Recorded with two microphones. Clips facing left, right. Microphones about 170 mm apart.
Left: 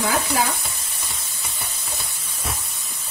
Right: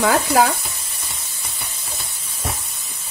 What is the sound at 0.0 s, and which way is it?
Speech, 65° right (ahead or behind).